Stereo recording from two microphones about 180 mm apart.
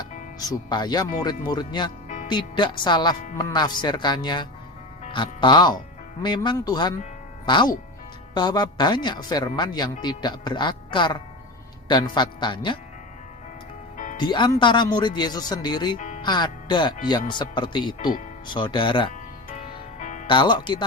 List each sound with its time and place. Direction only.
0.3 s speech: 20° left (ahead or behind)
13.9 s music: 45° left (ahead or behind)
14.2 s speech: 25° left (ahead or behind)
16.0 s music: 40° left (ahead or behind)
16.2 s speech: 25° left (ahead or behind)
20.0 s music: 40° left (ahead or behind)
20.2 s speech: 25° left (ahead or behind)